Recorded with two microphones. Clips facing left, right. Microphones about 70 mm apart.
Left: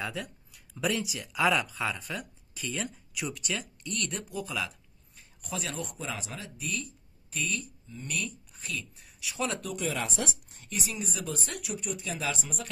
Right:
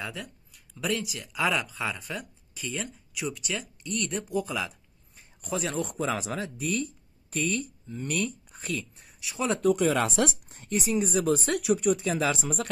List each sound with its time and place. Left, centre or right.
0.0 s speech: centre
4.5 s a sound: centre
5.4 s speech: right
5.9 s speech: right
6.4 s speech: right
8.0 s speech: right
8.5 s speech: right
9.3 s speech: right
9.8 s speech: right
10.5 s speech: right
11.3 s speech: right